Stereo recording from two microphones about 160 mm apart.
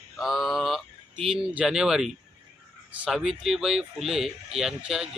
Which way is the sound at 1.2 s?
5° right (ahead or behind).